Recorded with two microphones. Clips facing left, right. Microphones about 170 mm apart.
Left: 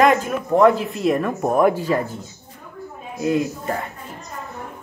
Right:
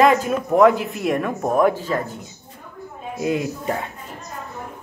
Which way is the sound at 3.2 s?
20° right (ahead or behind).